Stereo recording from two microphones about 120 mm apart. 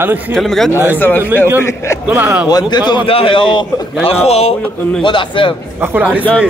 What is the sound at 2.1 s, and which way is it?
Speech, 15° right (ahead or behind).